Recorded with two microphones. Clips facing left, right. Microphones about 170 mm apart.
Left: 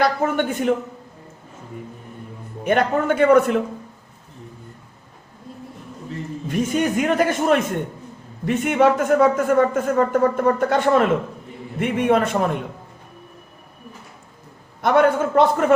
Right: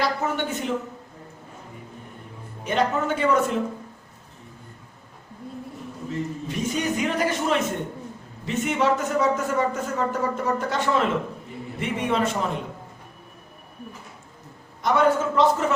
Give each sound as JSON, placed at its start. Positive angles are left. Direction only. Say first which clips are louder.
{"t": 0.0, "sound": "a man's voice", "louder": "left 6 dB", "side_deg": 55}
{"t": 2.6, "sound": "a man's voice", "louder": "left 5 dB", "side_deg": 55}
{"t": 6.5, "sound": "a man's voice", "louder": "left 7 dB", "side_deg": 50}
{"t": 14.8, "sound": "a man's voice", "louder": "left 4 dB", "side_deg": 60}